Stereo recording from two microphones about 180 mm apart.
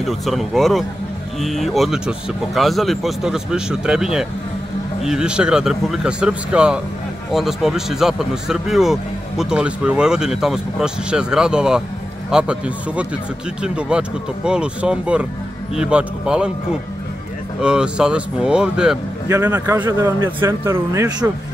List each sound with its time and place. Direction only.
0.0 s speech: centre (ahead or behind)
17.6 s speech: 5° right (ahead or behind)
19.2 s speech: 15° right (ahead or behind)